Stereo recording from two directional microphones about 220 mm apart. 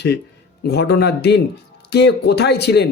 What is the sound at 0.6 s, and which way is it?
Speech, 50° left (ahead or behind).